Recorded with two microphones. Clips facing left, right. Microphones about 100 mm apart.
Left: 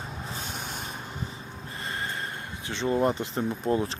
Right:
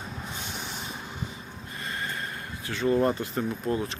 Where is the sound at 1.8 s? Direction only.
30° left (ahead or behind).